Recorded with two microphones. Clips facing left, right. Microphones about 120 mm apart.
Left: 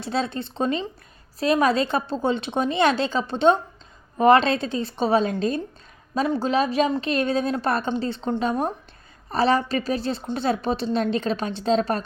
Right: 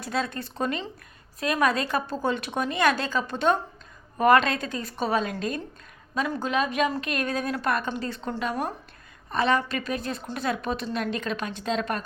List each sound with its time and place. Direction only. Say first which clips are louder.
0.0 s a woman's voice: left 3 dB; 30° left (ahead or behind)